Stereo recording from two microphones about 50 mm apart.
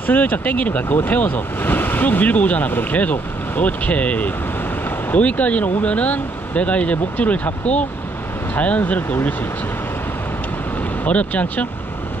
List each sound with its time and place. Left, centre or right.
0.0 s speech: left
11.1 s speech: left